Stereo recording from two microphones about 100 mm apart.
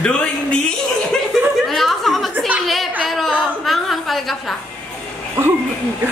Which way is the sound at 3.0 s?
Centre (ahead or behind).